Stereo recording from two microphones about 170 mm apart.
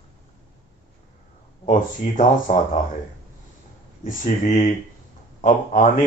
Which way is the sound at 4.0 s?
55° left (ahead or behind).